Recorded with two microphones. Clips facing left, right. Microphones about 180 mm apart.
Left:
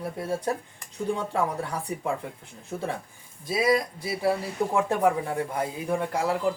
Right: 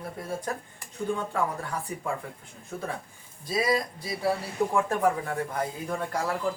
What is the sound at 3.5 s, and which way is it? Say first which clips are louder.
Speech: left 3 dB; 10° left (ahead or behind).